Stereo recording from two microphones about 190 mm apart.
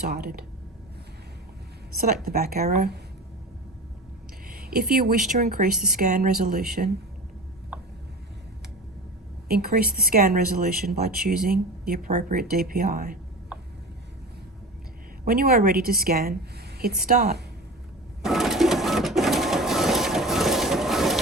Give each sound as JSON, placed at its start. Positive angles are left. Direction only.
{"t": 0.1, "sound": "speech", "side_deg": -55}
{"t": 2.2, "sound": "speech", "side_deg": -50}
{"t": 4.4, "sound": "speech", "side_deg": -50}
{"t": 9.5, "sound": "speech", "side_deg": -55}
{"t": 15.2, "sound": "a woman's voice", "side_deg": -50}
{"t": 18.2, "sound": "a sound", "side_deg": 0}